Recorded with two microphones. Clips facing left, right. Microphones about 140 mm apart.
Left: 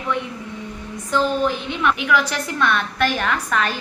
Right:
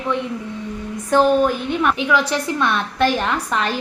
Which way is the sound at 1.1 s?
50° right (ahead or behind).